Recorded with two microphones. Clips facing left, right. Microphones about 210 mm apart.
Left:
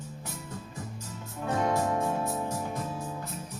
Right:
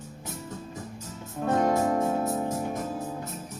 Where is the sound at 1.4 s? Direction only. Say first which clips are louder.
Right 4 dB; 45° right (ahead or behind).